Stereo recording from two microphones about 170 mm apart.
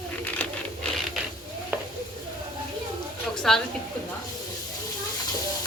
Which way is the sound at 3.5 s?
5° left (ahead or behind).